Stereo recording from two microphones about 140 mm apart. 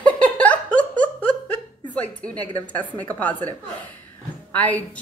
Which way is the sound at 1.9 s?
10° left (ahead or behind).